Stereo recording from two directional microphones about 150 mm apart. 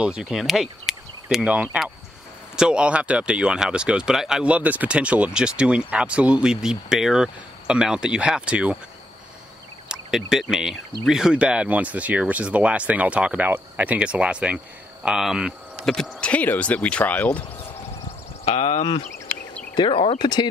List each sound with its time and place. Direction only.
0.0 s speech: 5° right (ahead or behind)
9.8 s speech: 5° right (ahead or behind)
18.4 s speech: 45° left (ahead or behind)
19.7 s speech: 35° left (ahead or behind)